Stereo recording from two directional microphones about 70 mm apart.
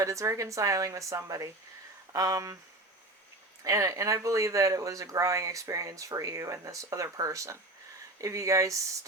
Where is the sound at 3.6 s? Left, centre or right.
Right.